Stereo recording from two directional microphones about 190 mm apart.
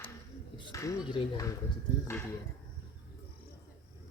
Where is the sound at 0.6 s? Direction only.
15° left (ahead or behind).